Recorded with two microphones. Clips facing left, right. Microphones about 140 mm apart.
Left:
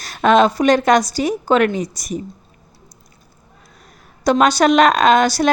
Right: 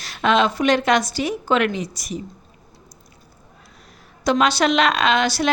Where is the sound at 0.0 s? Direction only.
45° left (ahead or behind).